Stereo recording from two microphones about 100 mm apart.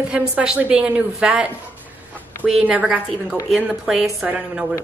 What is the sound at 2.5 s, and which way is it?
A woman's voice, 10° right (ahead or behind).